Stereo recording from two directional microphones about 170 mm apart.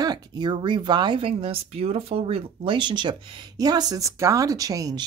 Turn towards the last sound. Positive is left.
turn(degrees=-20)  # may be behind; listen again after turning